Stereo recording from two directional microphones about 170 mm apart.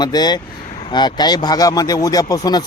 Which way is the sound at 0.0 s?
25° left (ahead or behind).